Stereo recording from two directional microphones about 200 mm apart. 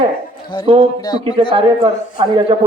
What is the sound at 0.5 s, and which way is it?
Speech, 20° left (ahead or behind).